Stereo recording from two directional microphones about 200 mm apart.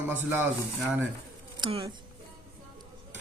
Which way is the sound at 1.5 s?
25° right (ahead or behind).